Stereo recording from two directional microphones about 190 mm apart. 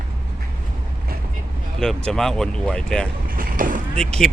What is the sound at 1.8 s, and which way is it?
Speech, 5° left (ahead or behind).